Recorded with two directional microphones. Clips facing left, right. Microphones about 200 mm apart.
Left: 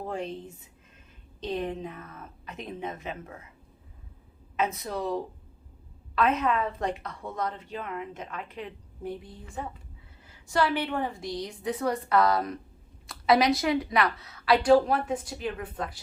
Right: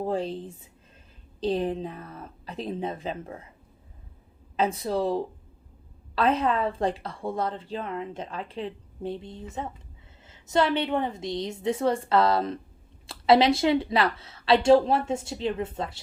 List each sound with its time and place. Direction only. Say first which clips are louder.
0.0 s speech: right 5 dB; 30° right (ahead or behind)
4.5 s a woman's voice: right 4 dB; 30° right (ahead or behind)